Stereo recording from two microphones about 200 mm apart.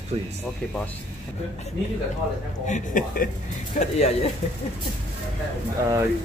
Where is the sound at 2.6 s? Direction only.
40° left (ahead or behind).